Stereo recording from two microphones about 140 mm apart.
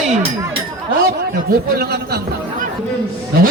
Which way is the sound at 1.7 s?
90° right.